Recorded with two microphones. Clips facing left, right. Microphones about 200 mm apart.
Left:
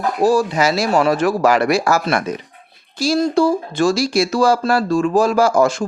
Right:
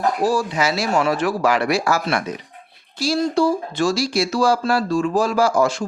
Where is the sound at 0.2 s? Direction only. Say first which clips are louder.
Left 5 dB; 45° left (ahead or behind).